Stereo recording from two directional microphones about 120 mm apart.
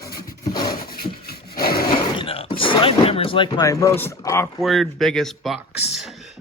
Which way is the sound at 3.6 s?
25° left (ahead or behind).